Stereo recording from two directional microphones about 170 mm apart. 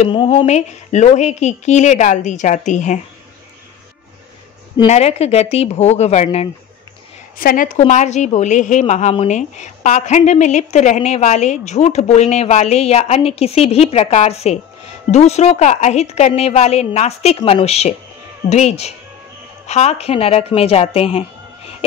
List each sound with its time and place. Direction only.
0.0 s speech: 30° left (ahead or behind)
0.3 s a woman's voice: 40° left (ahead or behind)
4.8 s a woman's voice: 40° left (ahead or behind)
7.3 s a woman's voice: 55° left (ahead or behind); by 21.2 s 35° left (ahead or behind)